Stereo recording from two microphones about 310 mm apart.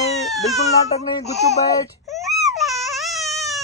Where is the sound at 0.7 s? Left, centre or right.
Centre.